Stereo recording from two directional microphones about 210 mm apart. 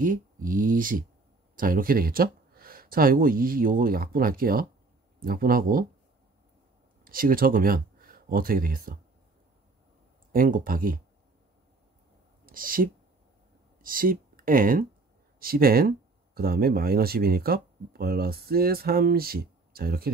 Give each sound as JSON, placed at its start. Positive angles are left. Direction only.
{"t": 0.0, "sound": "speech", "side_deg": -40}
{"t": 7.1, "sound": "speech", "side_deg": -45}
{"t": 10.3, "sound": "speech", "side_deg": -40}
{"t": 12.4, "sound": "speech", "side_deg": -40}